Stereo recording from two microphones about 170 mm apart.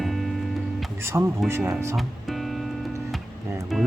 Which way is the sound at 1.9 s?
Centre (ahead or behind).